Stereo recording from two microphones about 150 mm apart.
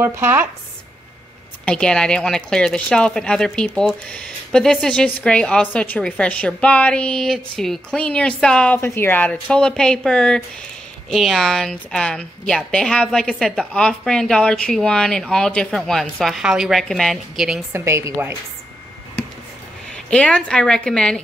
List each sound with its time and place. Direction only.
0.0 s a woman's voice: 15° right (ahead or behind)
1.7 s a woman's voice: 5° left (ahead or behind)
17.7 s a woman's voice: 20° right (ahead or behind)
20.1 s a woman's voice: 5° left (ahead or behind)